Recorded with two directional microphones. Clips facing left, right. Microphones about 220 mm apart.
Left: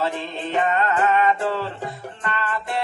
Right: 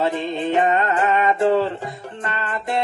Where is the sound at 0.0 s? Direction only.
20° right (ahead or behind).